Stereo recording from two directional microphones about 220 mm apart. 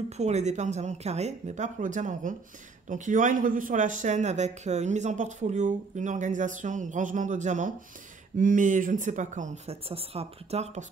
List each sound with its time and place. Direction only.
0.2 s a man's voice: 30° right (ahead or behind)